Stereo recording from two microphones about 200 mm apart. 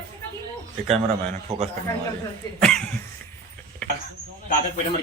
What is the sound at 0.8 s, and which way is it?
Speech, 35° right (ahead or behind).